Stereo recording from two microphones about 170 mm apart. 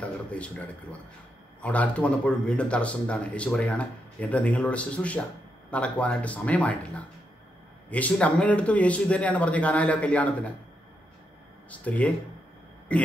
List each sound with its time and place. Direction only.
0.0 s speech: 10° left (ahead or behind)
11.7 s speech: 10° left (ahead or behind)